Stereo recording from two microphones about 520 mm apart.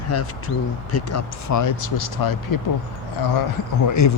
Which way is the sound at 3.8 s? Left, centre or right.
Left.